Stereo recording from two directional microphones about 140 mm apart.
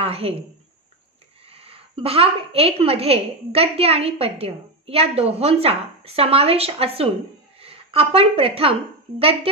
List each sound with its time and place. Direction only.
0.0 s a woman's voice: 45° right (ahead or behind)
1.5 s a woman's voice: 45° right (ahead or behind)